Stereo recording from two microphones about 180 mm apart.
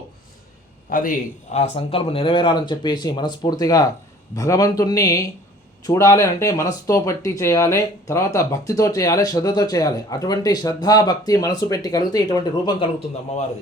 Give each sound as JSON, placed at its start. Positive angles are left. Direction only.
{"t": 0.9, "sound": "speech", "side_deg": 50}